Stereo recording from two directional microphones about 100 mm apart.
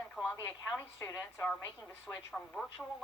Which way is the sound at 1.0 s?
25° left (ahead or behind).